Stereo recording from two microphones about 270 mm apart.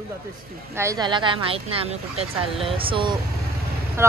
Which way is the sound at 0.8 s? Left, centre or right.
Centre.